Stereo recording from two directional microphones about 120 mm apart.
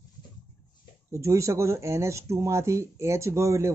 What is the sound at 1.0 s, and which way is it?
Speech, 25° right (ahead or behind).